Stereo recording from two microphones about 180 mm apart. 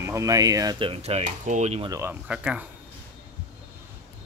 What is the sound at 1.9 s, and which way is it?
Speech, 15° right (ahead or behind).